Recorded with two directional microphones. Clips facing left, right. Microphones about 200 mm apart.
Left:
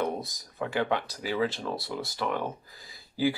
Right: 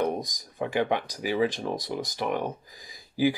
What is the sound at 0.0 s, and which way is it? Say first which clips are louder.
Speech: right 3 dB; 15° right (ahead or behind).